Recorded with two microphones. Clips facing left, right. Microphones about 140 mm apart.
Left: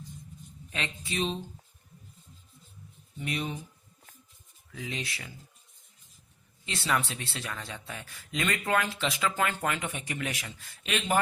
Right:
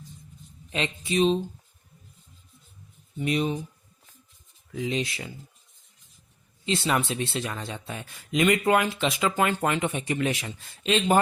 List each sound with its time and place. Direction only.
0.7 s speech: 20° right (ahead or behind)
3.2 s speech: 20° right (ahead or behind)
4.7 s speech: 25° right (ahead or behind)
6.7 s speech: 20° right (ahead or behind)